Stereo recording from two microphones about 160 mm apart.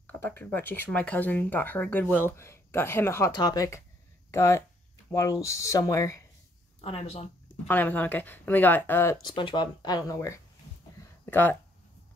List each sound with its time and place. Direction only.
0.0 s speech: 15° left (ahead or behind)
6.8 s speech: 35° left (ahead or behind)
7.6 s speech: 10° left (ahead or behind)